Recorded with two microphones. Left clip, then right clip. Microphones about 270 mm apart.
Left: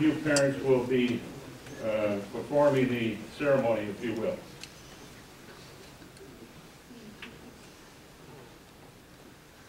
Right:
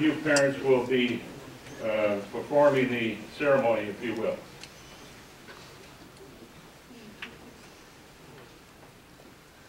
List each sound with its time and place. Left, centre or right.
0.0 s a man's voice: centre